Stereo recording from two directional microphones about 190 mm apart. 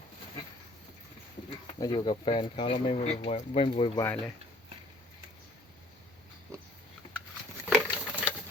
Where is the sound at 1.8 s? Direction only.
25° left (ahead or behind).